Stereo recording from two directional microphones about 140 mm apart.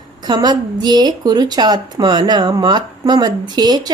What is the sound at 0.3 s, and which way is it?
A woman's voice, 30° right (ahead or behind).